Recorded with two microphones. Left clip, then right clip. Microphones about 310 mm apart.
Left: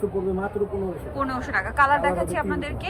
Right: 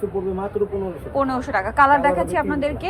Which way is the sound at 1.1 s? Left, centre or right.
Centre.